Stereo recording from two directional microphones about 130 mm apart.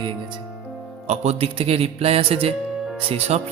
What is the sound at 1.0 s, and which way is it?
Speech, 60° right (ahead or behind).